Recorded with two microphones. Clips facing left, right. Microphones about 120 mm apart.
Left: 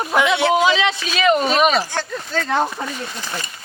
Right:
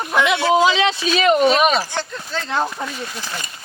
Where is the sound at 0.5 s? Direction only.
25° right (ahead or behind).